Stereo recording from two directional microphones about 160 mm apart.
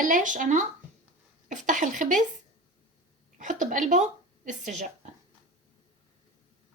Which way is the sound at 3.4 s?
55° right (ahead or behind).